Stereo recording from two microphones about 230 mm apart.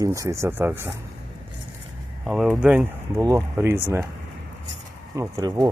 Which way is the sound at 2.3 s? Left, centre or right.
Centre.